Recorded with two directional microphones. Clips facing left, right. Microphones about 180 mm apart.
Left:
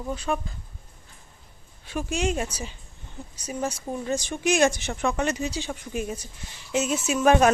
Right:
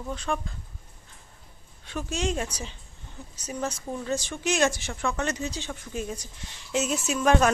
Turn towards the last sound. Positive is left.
turn(degrees=5)  # may be behind; listen again after turning